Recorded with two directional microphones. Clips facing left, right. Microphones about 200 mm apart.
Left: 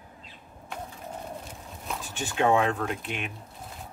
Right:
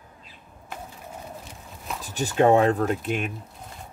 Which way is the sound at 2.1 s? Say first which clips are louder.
Right 5 dB; 40° right (ahead or behind).